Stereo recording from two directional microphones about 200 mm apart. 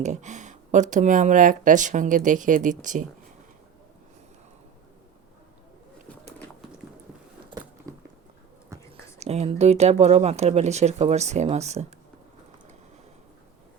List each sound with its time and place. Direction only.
0.0 s speech: 35° right (ahead or behind)
7.9 s a sound: 15° right (ahead or behind)
8.7 s whispering: 15° right (ahead or behind)
9.1 s speech: 30° right (ahead or behind)